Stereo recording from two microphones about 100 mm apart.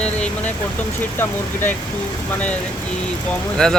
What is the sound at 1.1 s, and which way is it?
Speech, 20° left (ahead or behind).